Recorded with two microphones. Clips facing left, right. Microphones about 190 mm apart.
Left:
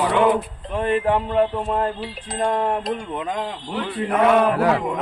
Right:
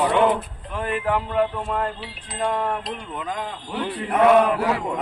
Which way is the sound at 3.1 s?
25° left (ahead or behind).